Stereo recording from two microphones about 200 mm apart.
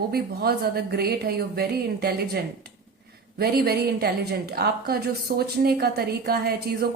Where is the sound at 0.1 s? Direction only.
50° right (ahead or behind).